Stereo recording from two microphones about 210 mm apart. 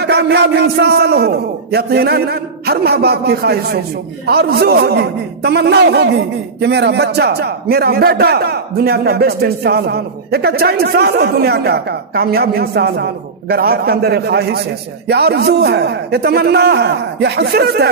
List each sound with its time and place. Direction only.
0.0 s a man's voice: 50° right (ahead or behind)